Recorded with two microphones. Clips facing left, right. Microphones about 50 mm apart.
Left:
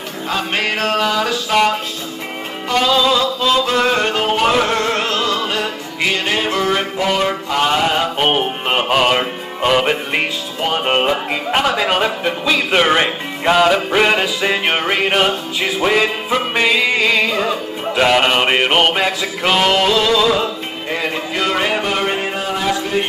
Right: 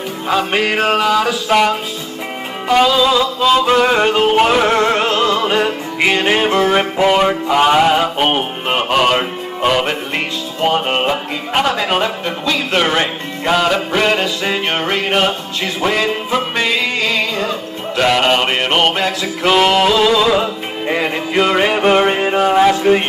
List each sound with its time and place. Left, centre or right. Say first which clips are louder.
0.3 s music: right 4 dB; centre
2.7 s music: right 3 dB; centre
11.0 s speech: left 1 dB; centre
12.4 s music: left 1 dB; centre
19.5 s speech: right 2 dB; centre
20.9 s music: right 4 dB; centre
22.4 s a sound: right 8 dB; right